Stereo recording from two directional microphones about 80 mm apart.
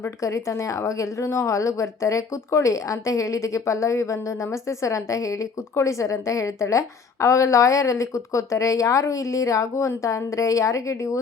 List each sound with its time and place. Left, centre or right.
0.2 s a woman's voice: left